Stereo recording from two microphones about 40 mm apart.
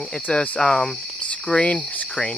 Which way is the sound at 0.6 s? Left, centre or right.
Centre.